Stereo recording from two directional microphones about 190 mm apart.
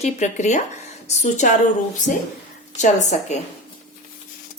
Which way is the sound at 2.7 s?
40° left (ahead or behind).